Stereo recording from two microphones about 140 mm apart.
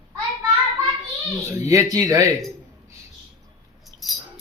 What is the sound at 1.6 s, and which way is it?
Speech, 20° right (ahead or behind).